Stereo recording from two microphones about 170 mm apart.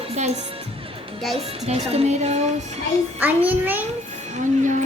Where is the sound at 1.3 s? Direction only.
35° right (ahead or behind).